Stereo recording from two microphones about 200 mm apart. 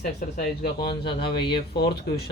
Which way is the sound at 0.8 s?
25° left (ahead or behind).